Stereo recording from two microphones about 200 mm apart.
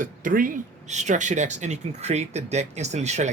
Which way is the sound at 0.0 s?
40° right (ahead or behind).